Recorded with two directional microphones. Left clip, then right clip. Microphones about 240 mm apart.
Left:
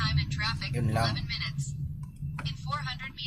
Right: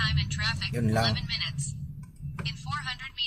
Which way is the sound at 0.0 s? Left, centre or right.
Right.